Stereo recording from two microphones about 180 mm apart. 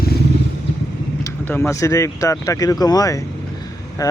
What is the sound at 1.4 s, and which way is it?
Speech, 10° left (ahead or behind).